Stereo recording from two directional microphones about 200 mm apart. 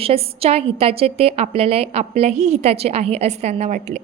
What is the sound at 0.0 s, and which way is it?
A woman's voice, 30° right (ahead or behind).